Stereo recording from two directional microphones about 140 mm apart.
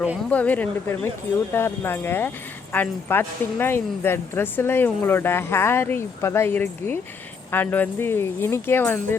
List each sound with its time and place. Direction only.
0.3 s speech: 10° left (ahead or behind)